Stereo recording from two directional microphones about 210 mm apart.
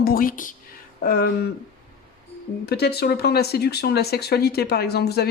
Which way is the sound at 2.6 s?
50° left (ahead or behind).